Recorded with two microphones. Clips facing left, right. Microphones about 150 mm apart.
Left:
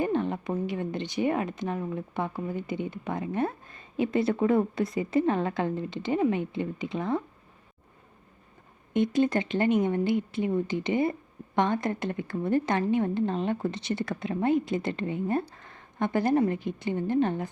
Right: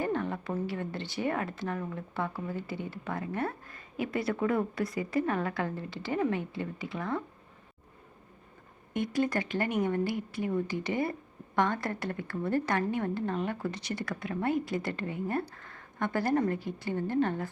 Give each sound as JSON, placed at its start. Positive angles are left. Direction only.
{"t": 0.0, "sound": "a woman's voice", "side_deg": 20}
{"t": 8.9, "sound": "a woman's voice", "side_deg": 20}